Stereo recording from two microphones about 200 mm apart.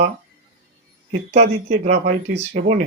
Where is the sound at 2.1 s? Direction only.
35° right (ahead or behind).